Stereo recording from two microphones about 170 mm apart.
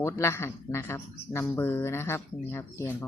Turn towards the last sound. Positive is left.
turn(degrees=15)  # may be behind; listen again after turning